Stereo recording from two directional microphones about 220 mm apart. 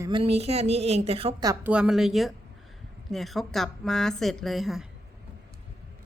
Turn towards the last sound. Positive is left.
turn(degrees=0)  # may be behind; listen again after turning